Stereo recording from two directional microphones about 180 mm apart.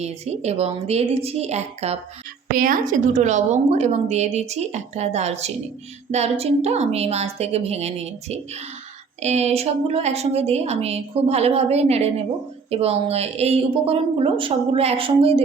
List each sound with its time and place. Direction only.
0.0 s a woman's voice: 35° right (ahead or behind)
2.5 s a woman's voice: 50° right (ahead or behind); by 15.4 s 30° right (ahead or behind)